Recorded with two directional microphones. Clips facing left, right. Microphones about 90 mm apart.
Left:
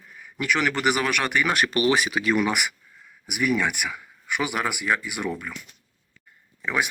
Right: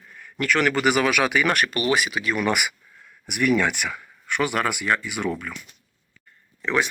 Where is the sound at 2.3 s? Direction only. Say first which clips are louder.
Even; centre (ahead or behind).